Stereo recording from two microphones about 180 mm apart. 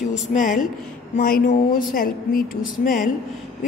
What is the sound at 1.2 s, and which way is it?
Speech, 50° left (ahead or behind).